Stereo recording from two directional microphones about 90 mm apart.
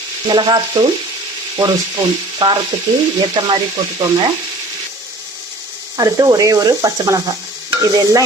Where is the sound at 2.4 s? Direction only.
55° right (ahead or behind).